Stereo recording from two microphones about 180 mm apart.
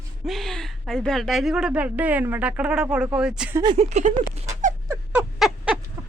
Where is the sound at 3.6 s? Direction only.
25° right (ahead or behind).